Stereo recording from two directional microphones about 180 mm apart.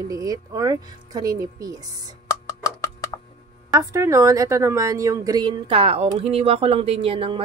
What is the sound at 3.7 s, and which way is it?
A woman's voice, 15° right (ahead or behind).